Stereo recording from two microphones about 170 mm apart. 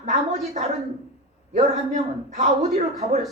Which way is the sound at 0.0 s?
40° right (ahead or behind).